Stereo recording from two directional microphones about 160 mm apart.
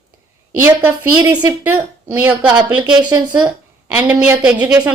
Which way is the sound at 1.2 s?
25° right (ahead or behind).